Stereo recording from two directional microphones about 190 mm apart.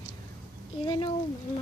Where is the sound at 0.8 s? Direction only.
25° left (ahead or behind).